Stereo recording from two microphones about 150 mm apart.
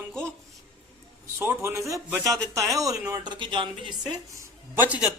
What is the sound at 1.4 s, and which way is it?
A man's voice, 15° right (ahead or behind).